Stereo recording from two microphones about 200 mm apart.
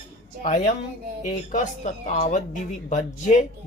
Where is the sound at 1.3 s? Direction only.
40° left (ahead or behind).